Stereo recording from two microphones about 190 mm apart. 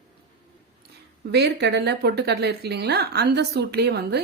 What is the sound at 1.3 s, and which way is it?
Speech, 65° right (ahead or behind).